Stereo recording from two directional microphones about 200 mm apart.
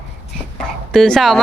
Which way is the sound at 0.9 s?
Centre (ahead or behind).